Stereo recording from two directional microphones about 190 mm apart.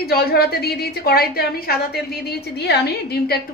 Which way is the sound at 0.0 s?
55° left (ahead or behind).